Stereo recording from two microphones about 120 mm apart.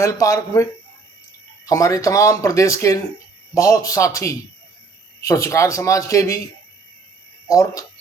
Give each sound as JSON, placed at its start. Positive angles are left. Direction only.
{"t": 0.0, "sound": "speech", "side_deg": 25}
{"t": 7.4, "sound": "speech", "side_deg": 25}